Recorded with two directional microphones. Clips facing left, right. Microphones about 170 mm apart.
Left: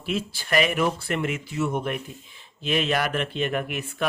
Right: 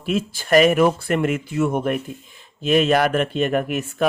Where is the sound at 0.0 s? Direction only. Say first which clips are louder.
Right 5 dB; 45° right (ahead or behind).